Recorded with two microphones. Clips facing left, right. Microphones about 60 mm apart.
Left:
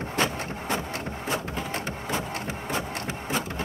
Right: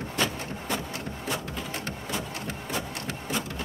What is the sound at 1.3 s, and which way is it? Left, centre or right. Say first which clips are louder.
Printer: left 3 dB; left.